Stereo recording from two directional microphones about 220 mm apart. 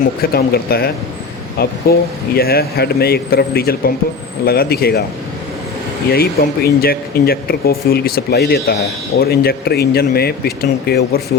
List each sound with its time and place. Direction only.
0.2 s speech: 45° left (ahead or behind)
6.1 s speech: 45° left (ahead or behind)